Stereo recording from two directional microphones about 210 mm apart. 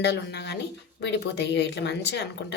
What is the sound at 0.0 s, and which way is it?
A woman's voice, 55° left (ahead or behind).